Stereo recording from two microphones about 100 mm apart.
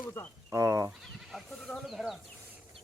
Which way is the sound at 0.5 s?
30° right (ahead or behind).